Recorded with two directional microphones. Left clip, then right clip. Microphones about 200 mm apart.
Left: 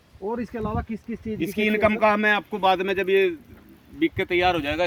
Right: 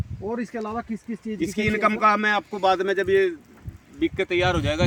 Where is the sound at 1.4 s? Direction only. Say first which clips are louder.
Left 1 dB; 20° left (ahead or behind).